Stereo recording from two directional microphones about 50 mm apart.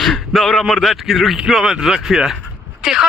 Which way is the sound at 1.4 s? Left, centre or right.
Centre.